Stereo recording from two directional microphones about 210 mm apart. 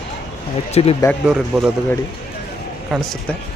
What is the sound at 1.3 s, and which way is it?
Speech, centre (ahead or behind).